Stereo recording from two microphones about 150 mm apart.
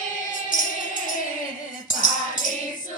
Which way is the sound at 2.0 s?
60° left (ahead or behind).